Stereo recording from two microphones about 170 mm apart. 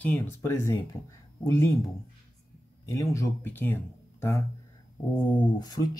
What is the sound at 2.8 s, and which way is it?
Speech, 20° left (ahead or behind).